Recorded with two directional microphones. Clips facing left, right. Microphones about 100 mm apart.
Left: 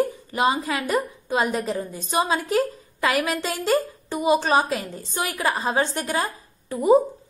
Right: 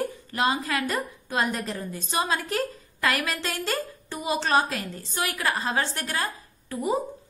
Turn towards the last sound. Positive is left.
turn(degrees=25)  # may be behind; listen again after turning